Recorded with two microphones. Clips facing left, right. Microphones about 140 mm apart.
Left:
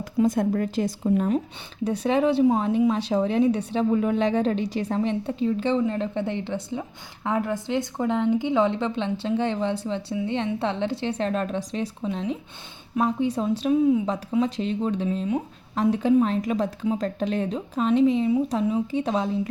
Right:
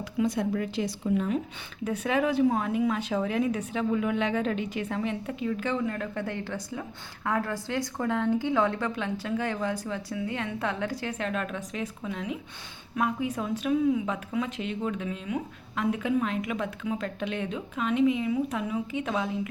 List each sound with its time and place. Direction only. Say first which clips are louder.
0.0 s a woman's voice: left 5 dB; 45° left (ahead or behind)